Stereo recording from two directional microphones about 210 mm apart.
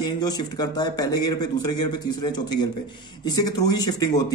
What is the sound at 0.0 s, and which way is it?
Speech, 20° left (ahead or behind).